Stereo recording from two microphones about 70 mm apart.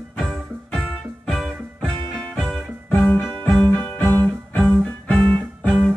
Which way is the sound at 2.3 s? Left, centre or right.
Centre.